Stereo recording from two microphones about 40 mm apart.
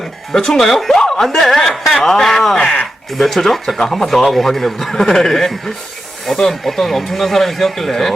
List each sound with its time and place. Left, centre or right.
0.3 s speech: centre
2.6 s speech: centre
3.1 s speech: centre